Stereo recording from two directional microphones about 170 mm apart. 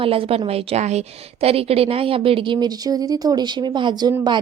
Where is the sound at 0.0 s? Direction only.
35° right (ahead or behind).